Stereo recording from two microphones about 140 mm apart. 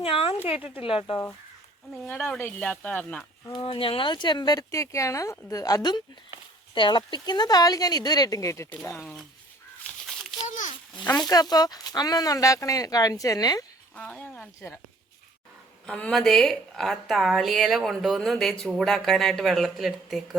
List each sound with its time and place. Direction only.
0.0 s speech: 40° left (ahead or behind)
2.0 s speech: 10° left (ahead or behind)
3.5 s speech: 40° left (ahead or behind); by 8.6 s 20° left (ahead or behind)
10.4 s a sound: 65° left (ahead or behind)
11.2 s speech: 30° left (ahead or behind)
13.9 s speech: 10° left (ahead or behind)
15.9 s a woman's voice: 5° left (ahead or behind)